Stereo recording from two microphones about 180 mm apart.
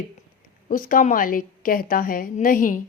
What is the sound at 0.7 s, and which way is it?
A woman's voice, 50° left (ahead or behind).